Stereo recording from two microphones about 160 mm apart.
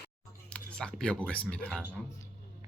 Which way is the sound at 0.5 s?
5° left (ahead or behind).